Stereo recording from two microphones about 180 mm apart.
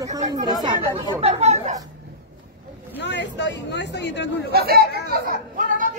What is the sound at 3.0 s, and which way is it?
Speech, 75° left (ahead or behind).